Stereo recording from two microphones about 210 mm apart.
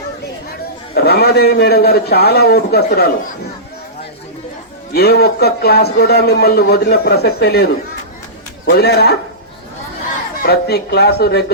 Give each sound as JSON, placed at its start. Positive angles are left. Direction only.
{"t": 0.9, "sound": "a man's voice", "side_deg": 50}
{"t": 4.9, "sound": "a man's voice", "side_deg": 50}
{"t": 8.7, "sound": "a man's voice", "side_deg": 50}
{"t": 10.4, "sound": "a man's voice", "side_deg": 50}